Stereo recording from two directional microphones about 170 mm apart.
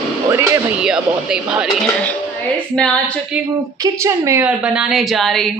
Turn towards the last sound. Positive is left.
turn(degrees=0)  # may be behind; listen again after turning